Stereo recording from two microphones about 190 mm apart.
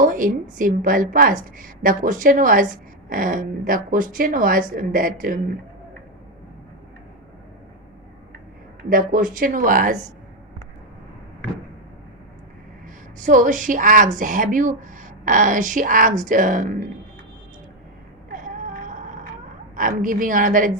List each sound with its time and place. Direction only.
0.0 s speech: 45° right (ahead or behind)
8.8 s speech: 45° right (ahead or behind)
13.1 s speech: 40° right (ahead or behind)
18.3 s music: 45° right (ahead or behind)
19.7 s speech: 45° right (ahead or behind)